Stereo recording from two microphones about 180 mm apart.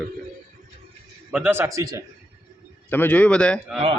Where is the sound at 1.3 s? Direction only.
10° right (ahead or behind).